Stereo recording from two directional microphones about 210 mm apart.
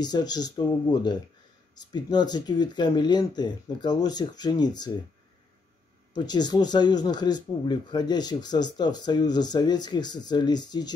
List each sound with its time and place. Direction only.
0.0 s speech: 20° left (ahead or behind)
6.1 s speech: 20° left (ahead or behind)